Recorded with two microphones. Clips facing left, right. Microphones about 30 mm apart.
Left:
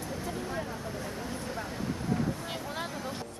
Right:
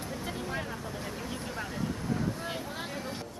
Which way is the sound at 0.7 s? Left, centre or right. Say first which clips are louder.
Left 1 dB; centre.